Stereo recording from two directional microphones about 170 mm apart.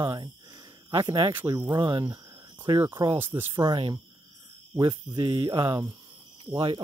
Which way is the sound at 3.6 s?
25° right (ahead or behind).